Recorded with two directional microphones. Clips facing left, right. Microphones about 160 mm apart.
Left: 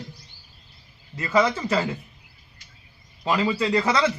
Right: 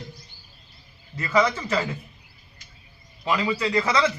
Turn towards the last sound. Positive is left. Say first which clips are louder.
# left 1 dB
turn(degrees=30)  # may be behind; listen again after turning